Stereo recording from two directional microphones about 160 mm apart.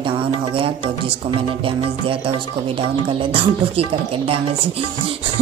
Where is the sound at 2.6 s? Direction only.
35° right (ahead or behind).